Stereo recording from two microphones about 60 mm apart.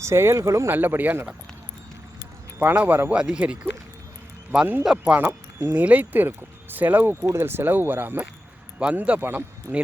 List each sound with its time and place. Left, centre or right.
0.0 s speech: right
0.7 s speech: right
2.6 s speech: right
3.1 s speech: centre
4.8 s speech: centre
5.1 s speech: right
9.0 s speech: right
9.7 s speech: right